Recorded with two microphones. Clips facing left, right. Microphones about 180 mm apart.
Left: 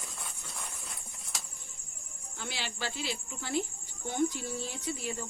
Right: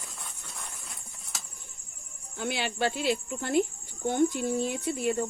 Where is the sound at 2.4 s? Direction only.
55° right (ahead or behind).